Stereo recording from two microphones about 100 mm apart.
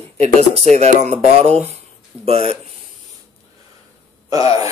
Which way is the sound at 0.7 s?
90° right.